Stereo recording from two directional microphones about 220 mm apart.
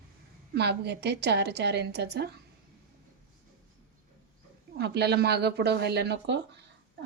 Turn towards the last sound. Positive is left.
turn(degrees=-50)  # may be behind; listen again after turning